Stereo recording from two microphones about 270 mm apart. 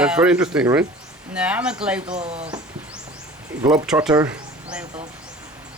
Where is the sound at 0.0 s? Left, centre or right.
Centre.